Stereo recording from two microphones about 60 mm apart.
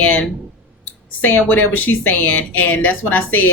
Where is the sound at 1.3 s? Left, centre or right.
Left.